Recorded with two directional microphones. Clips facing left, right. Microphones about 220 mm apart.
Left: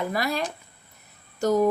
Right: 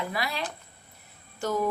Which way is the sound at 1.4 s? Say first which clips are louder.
Left 7 dB; 40° left (ahead or behind).